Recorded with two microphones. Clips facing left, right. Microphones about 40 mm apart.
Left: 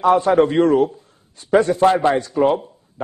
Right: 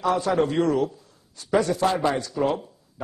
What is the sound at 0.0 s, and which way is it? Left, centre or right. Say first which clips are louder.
A man's voice: left 8 dB; left.